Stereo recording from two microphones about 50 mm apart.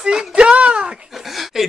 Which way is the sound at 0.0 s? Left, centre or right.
Centre.